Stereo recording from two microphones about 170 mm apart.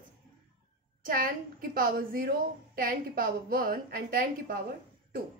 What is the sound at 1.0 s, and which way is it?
A woman's voice, 60° right (ahead or behind).